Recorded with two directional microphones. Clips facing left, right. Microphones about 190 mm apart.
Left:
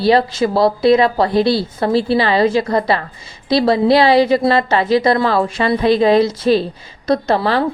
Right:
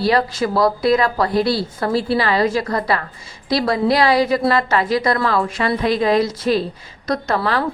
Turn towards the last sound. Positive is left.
turn(degrees=30)  # may be behind; listen again after turning